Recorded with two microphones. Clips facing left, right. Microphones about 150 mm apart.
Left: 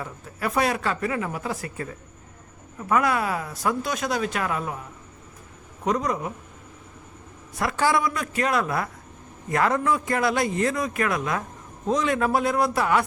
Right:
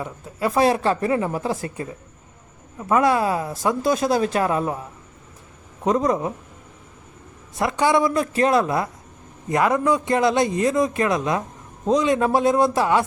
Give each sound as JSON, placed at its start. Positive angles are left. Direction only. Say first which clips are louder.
{"t": 0.0, "sound": "a man's voice", "louder": "right 5 dB", "side_deg": -25}
{"t": 5.8, "sound": "a man's voice", "louder": "right 5 dB", "side_deg": -25}
{"t": 7.5, "sound": "a man's voice", "louder": "right 4 dB", "side_deg": -20}